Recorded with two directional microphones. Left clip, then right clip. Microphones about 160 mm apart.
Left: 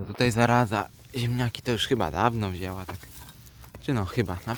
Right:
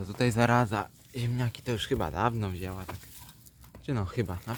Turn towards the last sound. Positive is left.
turn(degrees=55)  # may be behind; listen again after turning